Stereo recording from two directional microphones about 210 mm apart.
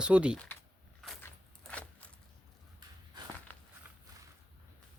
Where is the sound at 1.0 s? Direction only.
Centre (ahead or behind).